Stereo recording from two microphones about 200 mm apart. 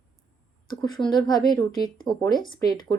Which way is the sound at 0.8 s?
20° left (ahead or behind).